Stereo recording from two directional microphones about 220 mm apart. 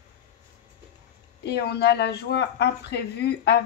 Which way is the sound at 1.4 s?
50° left (ahead or behind).